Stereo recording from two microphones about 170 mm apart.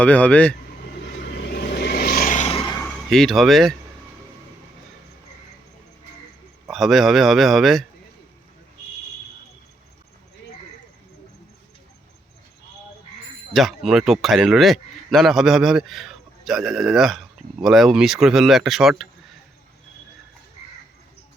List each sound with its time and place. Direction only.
0.0 s speech: 10° left (ahead or behind)
1.5 s vehicle: 75° left (ahead or behind); by 2.7 s 35° left (ahead or behind)
2.8 s speech: centre (ahead or behind)
6.7 s a man's voice: centre (ahead or behind)
13.5 s a man's voice: centre (ahead or behind)